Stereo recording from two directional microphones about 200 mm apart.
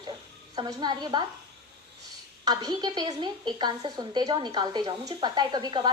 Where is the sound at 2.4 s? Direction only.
20° right (ahead or behind).